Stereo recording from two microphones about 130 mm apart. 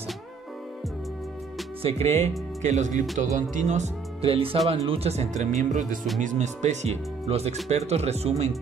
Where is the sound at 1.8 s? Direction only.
55° right (ahead or behind); by 3.9 s 70° right (ahead or behind).